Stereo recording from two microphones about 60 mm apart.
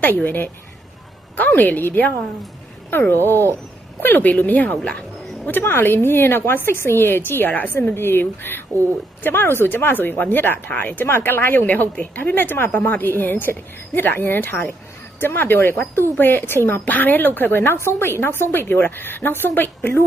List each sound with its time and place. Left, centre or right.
0.0 s a woman's voice: left